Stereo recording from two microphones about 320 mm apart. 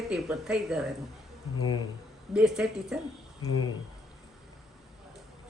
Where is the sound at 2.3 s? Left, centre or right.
Centre.